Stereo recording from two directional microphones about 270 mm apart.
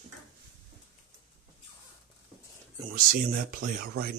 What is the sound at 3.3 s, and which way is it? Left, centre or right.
Speech, right.